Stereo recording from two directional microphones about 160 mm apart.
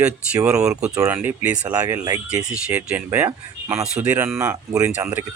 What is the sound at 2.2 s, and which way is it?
Speech, 5° right (ahead or behind).